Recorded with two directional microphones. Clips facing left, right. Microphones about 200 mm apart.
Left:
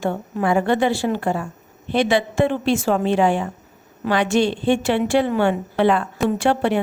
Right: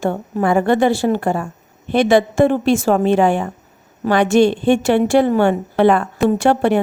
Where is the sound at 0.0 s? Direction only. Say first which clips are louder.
Right 3 dB; 45° right (ahead or behind).